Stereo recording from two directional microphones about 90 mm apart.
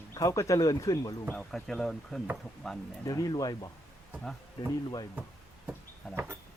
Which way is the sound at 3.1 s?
40° left (ahead or behind).